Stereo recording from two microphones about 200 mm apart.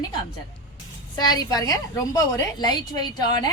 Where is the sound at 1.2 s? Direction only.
20° left (ahead or behind).